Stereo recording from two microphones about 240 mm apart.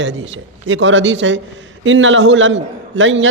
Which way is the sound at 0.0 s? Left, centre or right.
Right.